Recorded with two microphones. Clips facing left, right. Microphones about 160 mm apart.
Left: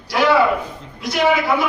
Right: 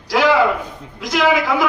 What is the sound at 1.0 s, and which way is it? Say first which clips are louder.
Speech: right 1 dB; 90° right.